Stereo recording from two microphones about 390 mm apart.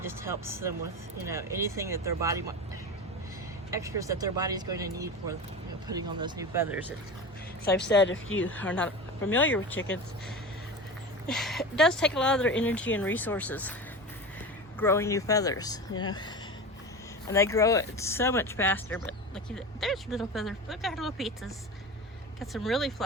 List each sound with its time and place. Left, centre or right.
0.0 s speech: centre
3.7 s speech: centre
7.6 s speech: left
8.4 s speech: centre
11.3 s speech: centre
14.8 s speech: centre